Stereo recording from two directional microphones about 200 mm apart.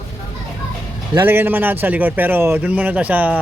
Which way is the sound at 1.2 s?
10° right (ahead or behind).